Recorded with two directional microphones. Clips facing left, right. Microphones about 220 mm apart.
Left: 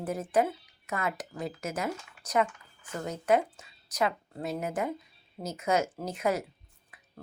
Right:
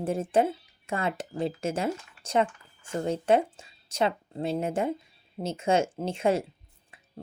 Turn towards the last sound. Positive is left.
turn(degrees=-25)  # may be behind; listen again after turning